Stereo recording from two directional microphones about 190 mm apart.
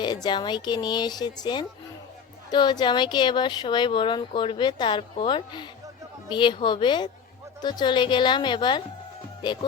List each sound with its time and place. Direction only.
0.0 s speech: 20° left (ahead or behind)